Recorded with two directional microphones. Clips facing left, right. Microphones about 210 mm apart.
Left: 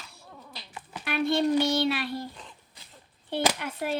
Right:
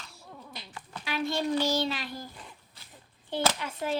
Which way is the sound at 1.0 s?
60° left (ahead or behind).